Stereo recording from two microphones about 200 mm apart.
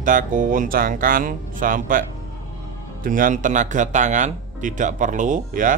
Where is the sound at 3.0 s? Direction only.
40° right (ahead or behind).